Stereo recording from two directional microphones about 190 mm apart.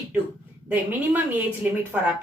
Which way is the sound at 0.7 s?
10° right (ahead or behind).